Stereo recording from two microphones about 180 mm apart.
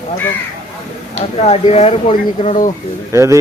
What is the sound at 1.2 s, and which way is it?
Speech, 35° left (ahead or behind).